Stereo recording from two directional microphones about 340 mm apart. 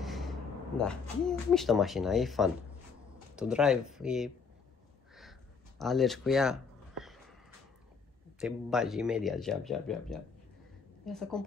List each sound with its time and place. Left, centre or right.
0.0 s a man's voice: centre
5.8 s a sound: centre
8.4 s speech: centre